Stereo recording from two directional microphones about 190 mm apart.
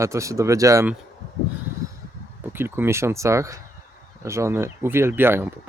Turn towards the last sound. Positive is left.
turn(degrees=-10)  # may be behind; listen again after turning